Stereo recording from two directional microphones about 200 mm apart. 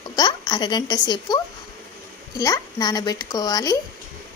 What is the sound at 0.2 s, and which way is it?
Speech, 20° left (ahead or behind).